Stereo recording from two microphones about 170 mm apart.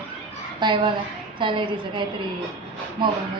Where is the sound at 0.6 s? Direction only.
25° right (ahead or behind).